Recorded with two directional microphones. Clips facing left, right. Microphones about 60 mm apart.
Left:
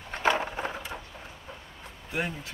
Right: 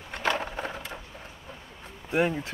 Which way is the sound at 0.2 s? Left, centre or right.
Centre.